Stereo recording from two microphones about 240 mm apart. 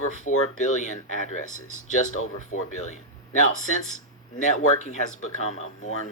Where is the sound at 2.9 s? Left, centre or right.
Left.